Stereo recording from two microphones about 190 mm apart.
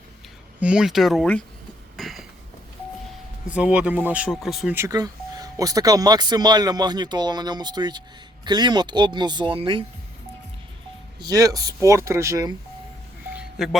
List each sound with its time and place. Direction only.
0.6 s speech: 5° right (ahead or behind)
2.0 s a sound: centre (ahead or behind)
3.4 s speech: 5° right (ahead or behind)
4.8 s speech: 20° right (ahead or behind)
11.3 s speech: 20° right (ahead or behind)
13.3 s music: 5° right (ahead or behind)